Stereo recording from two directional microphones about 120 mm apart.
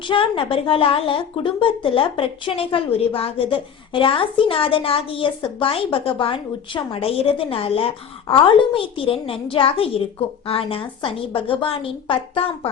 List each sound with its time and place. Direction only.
0.0 s a woman's voice: 45° left (ahead or behind)